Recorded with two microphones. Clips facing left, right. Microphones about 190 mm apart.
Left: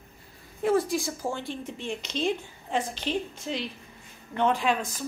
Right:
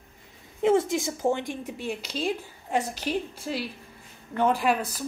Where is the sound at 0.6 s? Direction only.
25° right (ahead or behind).